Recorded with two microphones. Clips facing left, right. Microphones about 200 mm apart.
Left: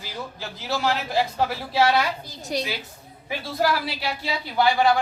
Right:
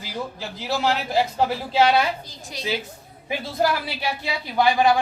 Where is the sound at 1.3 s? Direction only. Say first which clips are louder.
Right 2 dB; 20° right (ahead or behind).